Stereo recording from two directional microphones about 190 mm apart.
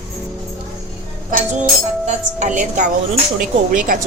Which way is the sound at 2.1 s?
40° right (ahead or behind).